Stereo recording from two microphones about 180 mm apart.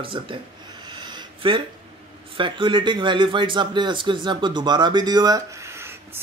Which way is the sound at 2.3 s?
25° right (ahead or behind).